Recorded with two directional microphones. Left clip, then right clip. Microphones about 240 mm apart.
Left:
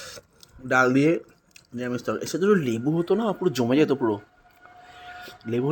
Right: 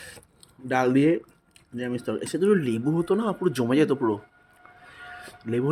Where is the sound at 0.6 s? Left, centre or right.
Centre.